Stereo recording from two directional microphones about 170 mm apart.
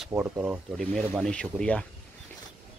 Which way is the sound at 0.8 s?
Centre (ahead or behind).